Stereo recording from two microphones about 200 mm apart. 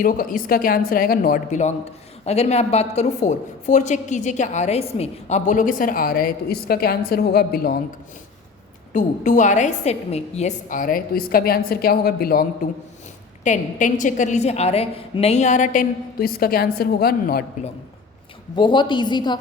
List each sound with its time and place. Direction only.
0.0 s a woman's voice: 45° left (ahead or behind)
8.9 s a woman's voice: 40° left (ahead or behind)
13.4 s a woman's voice: 40° left (ahead or behind)
18.5 s a woman's voice: 25° left (ahead or behind)